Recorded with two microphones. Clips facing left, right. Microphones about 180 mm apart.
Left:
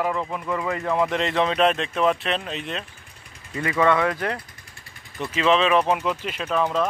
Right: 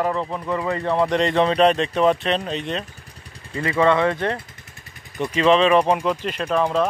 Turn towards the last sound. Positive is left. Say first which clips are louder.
# right 3 dB
turn(degrees=-10)  # may be behind; listen again after turning